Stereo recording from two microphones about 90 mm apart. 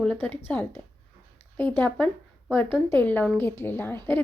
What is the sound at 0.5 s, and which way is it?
A woman's voice, 15° left (ahead or behind).